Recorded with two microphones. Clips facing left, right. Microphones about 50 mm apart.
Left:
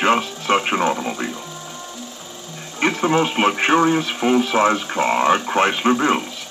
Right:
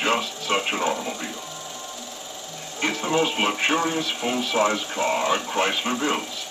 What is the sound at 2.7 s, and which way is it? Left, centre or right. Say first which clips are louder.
Speech: left 5 dB; left.